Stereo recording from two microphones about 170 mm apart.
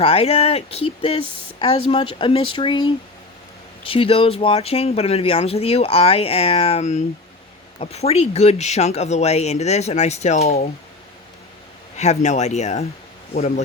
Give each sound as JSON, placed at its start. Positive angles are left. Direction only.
{"t": 0.0, "sound": "speech", "side_deg": 35}
{"t": 11.9, "sound": "speech", "side_deg": 40}